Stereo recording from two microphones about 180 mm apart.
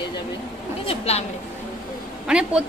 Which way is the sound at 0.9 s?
35° left (ahead or behind).